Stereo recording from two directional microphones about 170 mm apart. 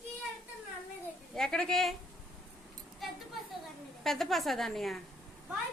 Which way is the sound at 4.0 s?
Centre (ahead or behind).